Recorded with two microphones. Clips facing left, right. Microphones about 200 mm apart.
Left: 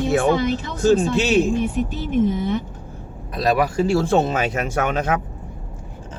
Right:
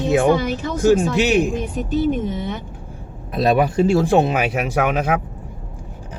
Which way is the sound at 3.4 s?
25° right (ahead or behind).